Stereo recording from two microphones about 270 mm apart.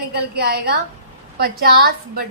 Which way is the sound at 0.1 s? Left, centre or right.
Right.